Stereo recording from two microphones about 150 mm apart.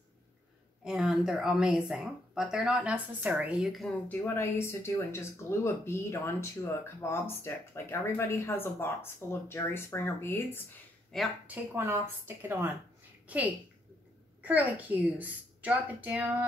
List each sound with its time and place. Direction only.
0.8 s speech: 5° right (ahead or behind)
4.1 s speech: 15° left (ahead or behind)
11.1 s speech: centre (ahead or behind)
11.4 s a woman's voice: 10° right (ahead or behind)